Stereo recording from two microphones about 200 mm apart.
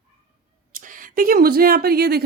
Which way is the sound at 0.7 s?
40° right (ahead or behind).